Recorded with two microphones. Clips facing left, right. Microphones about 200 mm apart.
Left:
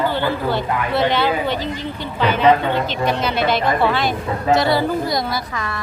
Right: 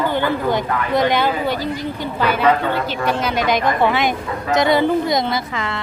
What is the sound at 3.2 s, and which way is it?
A woman's voice, 15° right (ahead or behind).